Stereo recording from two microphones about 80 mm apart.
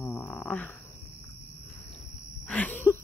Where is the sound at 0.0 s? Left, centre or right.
Left.